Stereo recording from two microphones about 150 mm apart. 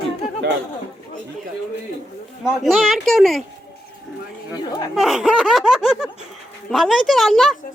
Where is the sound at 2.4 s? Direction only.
Centre (ahead or behind).